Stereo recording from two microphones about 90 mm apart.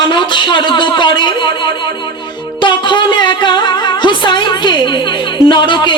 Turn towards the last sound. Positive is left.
turn(degrees=60)  # may be behind; listen again after turning